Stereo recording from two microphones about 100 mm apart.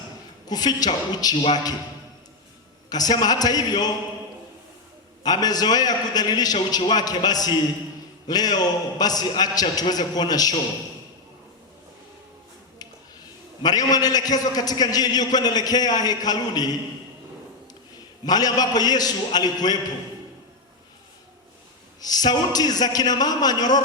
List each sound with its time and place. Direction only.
0.4 s a man's voice: 40° left (ahead or behind)
2.9 s a man's voice: 40° left (ahead or behind)
5.2 s a man's voice: 40° left (ahead or behind)
13.6 s a man's voice: 40° left (ahead or behind)
18.3 s a man's voice: 40° left (ahead or behind)
22.0 s a man's voice: 40° left (ahead or behind)